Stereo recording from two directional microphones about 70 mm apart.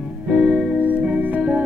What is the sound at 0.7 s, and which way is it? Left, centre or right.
Music, right.